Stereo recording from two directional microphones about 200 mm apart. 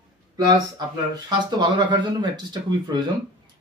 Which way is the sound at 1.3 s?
20° right (ahead or behind).